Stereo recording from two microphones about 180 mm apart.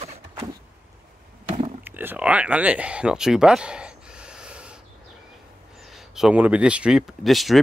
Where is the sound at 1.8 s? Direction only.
10° right (ahead or behind).